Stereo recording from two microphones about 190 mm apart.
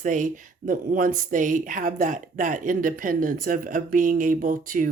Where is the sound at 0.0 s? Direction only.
45° right (ahead or behind).